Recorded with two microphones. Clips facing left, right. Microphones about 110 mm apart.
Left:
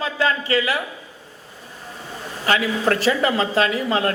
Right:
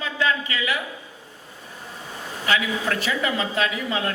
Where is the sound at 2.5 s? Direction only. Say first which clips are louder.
Left 4 dB; 40° left (ahead or behind).